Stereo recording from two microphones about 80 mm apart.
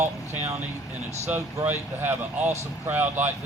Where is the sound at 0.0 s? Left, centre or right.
Right.